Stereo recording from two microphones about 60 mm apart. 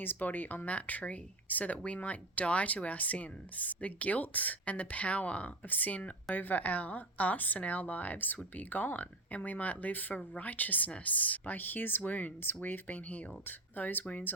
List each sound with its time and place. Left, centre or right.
0.0 s speech: left